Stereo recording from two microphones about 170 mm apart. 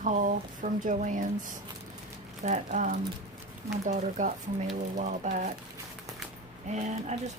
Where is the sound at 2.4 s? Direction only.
45° right (ahead or behind).